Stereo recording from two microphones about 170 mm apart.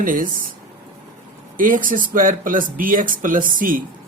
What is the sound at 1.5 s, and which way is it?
Speech, 55° right (ahead or behind).